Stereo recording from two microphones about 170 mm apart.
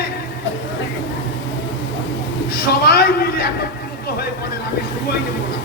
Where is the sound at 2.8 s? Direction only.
65° left (ahead or behind).